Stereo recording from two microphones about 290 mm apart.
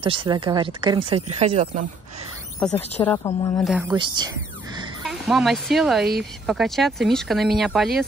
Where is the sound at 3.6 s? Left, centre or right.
Centre.